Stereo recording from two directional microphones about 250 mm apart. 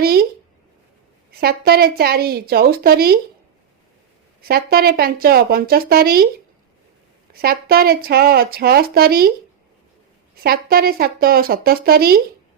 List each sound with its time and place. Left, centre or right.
0.0 s a sound: right
1.4 s speech: right
4.4 s speech: right
7.4 s speech: right
10.4 s speech: right